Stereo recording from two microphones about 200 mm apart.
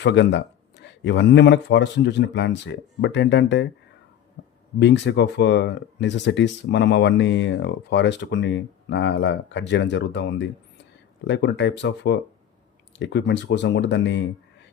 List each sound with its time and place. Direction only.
0.0 s speech: 60° left (ahead or behind)
4.4 s a sound: 55° left (ahead or behind)
4.8 s speech: 60° left (ahead or behind)